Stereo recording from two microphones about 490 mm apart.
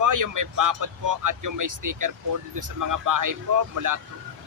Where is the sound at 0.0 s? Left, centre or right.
Right.